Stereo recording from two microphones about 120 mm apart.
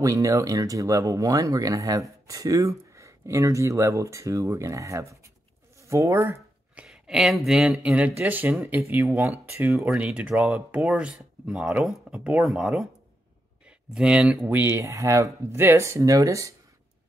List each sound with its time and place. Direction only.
0.0 s speech: 30° right (ahead or behind)
6.7 s speech: 5° right (ahead or behind); by 9.8 s 20° right (ahead or behind)
9.8 s speech: 10° right (ahead or behind); by 16.5 s 25° right (ahead or behind)